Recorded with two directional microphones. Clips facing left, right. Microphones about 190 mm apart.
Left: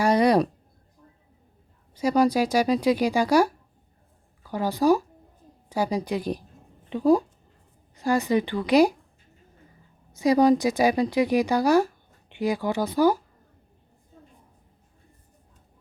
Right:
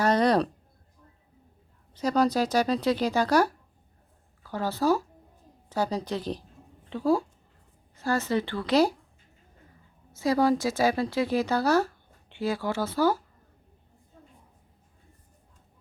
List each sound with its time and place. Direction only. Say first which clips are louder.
0.0 s a sound: left 3 dB; 10° left (ahead or behind)
2.0 s a woman's voice: left 3 dB; 10° left (ahead or behind)
10.1 s a woman's voice: left 5 dB; 15° left (ahead or behind)